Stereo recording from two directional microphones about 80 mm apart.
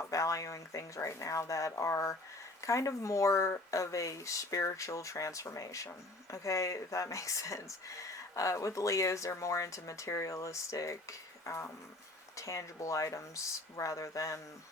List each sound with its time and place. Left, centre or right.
0.1 s speech: left